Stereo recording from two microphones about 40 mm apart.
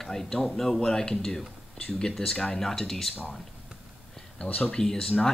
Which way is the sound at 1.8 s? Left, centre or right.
Left.